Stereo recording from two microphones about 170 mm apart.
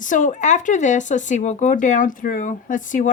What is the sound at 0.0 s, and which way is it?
Speech, 50° left (ahead or behind).